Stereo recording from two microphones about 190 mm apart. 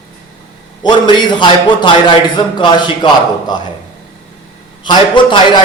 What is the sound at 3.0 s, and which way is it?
Speech, 25° left (ahead or behind).